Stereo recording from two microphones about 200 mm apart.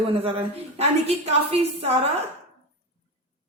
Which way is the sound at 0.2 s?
30° right (ahead or behind).